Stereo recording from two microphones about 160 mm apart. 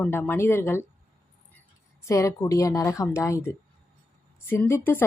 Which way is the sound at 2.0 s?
20° left (ahead or behind).